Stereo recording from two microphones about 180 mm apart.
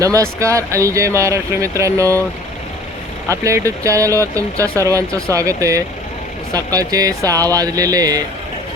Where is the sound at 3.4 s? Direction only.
15° right (ahead or behind).